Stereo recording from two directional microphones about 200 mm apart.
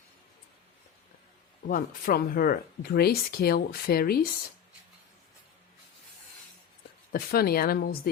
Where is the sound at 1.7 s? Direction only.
45° left (ahead or behind).